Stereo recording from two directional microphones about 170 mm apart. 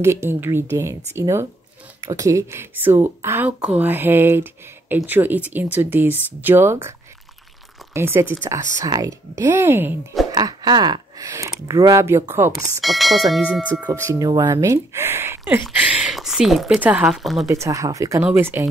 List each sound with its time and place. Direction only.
0.0 s speech: 15° right (ahead or behind)
7.9 s speech: 15° right (ahead or behind)
10.3 s speech: 25° right (ahead or behind)
12.8 s speech: centre (ahead or behind)
13.9 s speech: 15° right (ahead or behind); by 17.5 s centre (ahead or behind)
17.5 s speech: 20° right (ahead or behind)